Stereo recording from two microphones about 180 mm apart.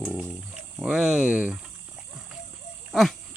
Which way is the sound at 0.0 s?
5° right (ahead or behind).